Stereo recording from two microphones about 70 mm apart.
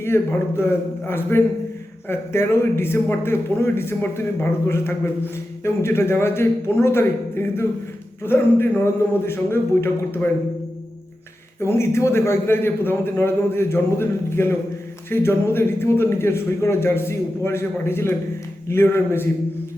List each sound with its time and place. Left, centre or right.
0.0 s a man's voice: left
11.6 s a man's voice: left